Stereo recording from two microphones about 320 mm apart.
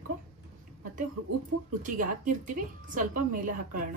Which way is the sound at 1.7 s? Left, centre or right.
Right.